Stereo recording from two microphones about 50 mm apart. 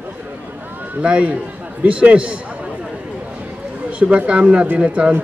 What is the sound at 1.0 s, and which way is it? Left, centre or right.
A man's voice, right.